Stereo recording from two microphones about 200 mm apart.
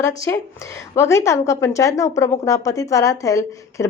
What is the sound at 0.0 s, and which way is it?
Speech, 15° left (ahead or behind).